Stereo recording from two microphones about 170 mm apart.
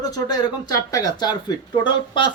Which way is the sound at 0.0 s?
20° left (ahead or behind).